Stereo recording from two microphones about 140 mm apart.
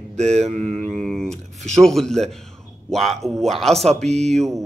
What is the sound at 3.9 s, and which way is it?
Speech, 50° right (ahead or behind).